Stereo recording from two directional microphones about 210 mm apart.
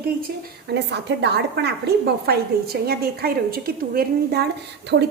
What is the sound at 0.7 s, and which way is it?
A woman's voice, 55° right (ahead or behind).